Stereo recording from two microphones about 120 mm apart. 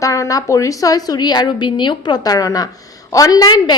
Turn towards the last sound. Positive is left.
turn(degrees=35)  # may be behind; listen again after turning